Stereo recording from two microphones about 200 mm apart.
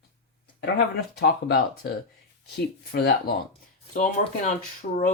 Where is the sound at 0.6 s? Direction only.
55° left (ahead or behind).